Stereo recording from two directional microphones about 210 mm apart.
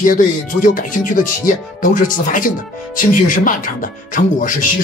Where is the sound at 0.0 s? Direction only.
40° left (ahead or behind).